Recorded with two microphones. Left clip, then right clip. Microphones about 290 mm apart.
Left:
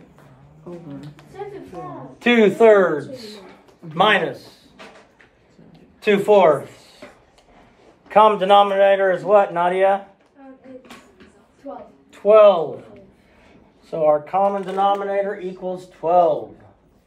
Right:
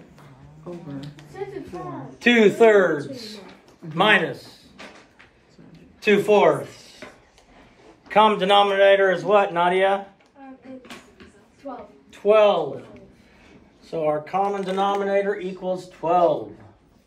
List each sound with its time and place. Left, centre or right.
2.2 s speech: centre
6.0 s speech: centre
8.1 s speech: centre
12.1 s speech: centre
13.8 s speech: centre